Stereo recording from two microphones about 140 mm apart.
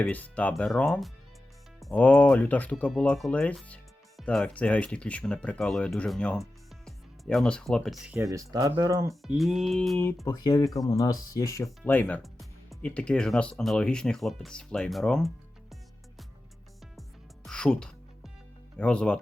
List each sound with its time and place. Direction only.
0.0 s speech: 10° left (ahead or behind)
8.1 s speech: 20° right (ahead or behind)
9.2 s speech: centre (ahead or behind)
10.2 s speech: 25° left (ahead or behind)
11.9 s speech: 10° left (ahead or behind)
12.2 s speech: centre (ahead or behind)
17.4 s music: 5° left (ahead or behind)
18.8 s speech: 5° left (ahead or behind)